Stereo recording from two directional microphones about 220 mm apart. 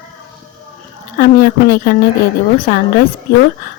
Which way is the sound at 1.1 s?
40° left (ahead or behind).